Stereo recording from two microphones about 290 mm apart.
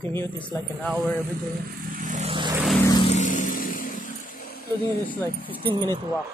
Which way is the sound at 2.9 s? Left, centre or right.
Centre.